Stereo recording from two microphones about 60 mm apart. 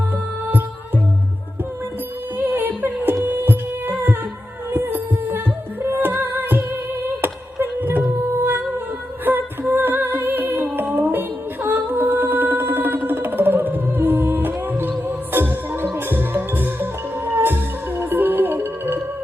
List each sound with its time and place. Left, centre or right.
2.4 s music: right
4.7 s a sound: right
5.8 s music: right
9.2 s music: right